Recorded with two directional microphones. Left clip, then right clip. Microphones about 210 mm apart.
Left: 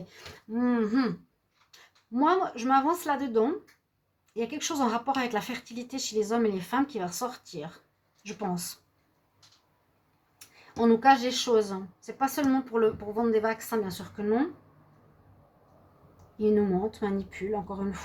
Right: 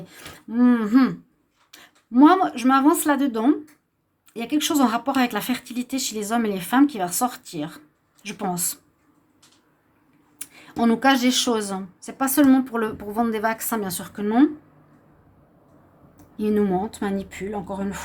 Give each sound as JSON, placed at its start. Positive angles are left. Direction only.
{"t": 0.1, "sound": "a woman's voice", "side_deg": -50}
{"t": 10.3, "sound": "speech", "side_deg": -50}
{"t": 16.4, "sound": "speech", "side_deg": -55}